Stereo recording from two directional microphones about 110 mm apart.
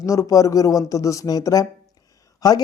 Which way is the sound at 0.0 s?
30° left (ahead or behind).